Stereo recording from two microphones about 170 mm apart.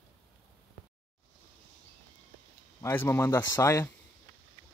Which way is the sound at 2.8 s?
15° left (ahead or behind).